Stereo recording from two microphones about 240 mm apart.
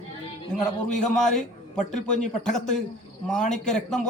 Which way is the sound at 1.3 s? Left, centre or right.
Left.